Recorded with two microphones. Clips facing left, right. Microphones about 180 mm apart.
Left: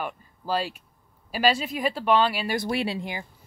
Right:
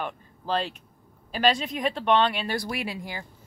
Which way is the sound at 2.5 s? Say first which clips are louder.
Left 4 dB; 30° left (ahead or behind).